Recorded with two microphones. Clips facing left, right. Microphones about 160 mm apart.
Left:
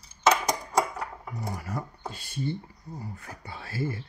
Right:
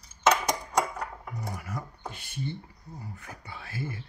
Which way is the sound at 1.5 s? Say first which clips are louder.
Left 3 dB; 30° left (ahead or behind).